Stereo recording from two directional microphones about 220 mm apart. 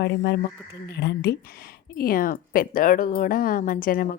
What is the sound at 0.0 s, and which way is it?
A woman's voice, 50° left (ahead or behind).